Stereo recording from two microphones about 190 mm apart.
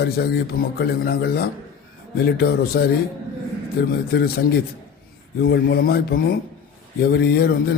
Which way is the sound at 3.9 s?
55° left (ahead or behind).